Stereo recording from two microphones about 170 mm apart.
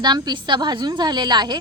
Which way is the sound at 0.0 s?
25° right (ahead or behind).